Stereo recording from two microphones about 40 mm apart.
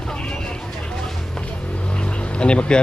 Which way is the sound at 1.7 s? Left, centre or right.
Left.